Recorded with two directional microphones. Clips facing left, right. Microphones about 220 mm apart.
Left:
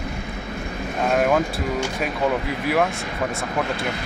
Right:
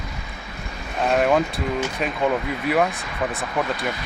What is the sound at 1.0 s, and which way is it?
Speech, centre (ahead or behind).